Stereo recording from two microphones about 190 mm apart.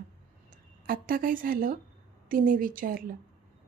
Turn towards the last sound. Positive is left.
turn(degrees=-45)  # may be behind; listen again after turning